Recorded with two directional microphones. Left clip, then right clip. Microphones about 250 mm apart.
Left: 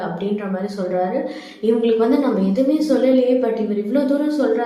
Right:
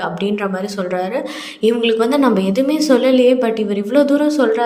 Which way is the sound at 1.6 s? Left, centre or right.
Right.